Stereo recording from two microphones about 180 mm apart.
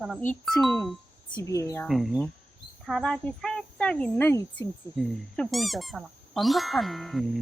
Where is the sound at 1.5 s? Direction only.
15° left (ahead or behind).